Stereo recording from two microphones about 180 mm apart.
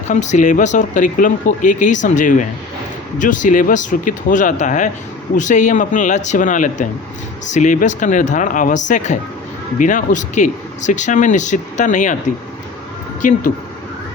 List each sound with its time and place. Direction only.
0.1 s speech: 40° left (ahead or behind)
13.2 s speech: 45° left (ahead or behind)